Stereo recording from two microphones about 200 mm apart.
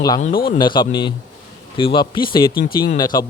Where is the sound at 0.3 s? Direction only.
45° left (ahead or behind).